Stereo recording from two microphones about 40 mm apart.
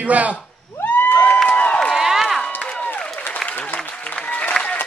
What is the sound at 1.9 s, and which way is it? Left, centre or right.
Run, centre.